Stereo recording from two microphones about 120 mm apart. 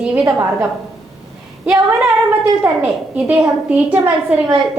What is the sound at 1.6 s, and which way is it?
A woman's voice, 10° right (ahead or behind).